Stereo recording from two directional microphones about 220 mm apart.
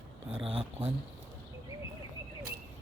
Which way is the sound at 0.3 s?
25° right (ahead or behind).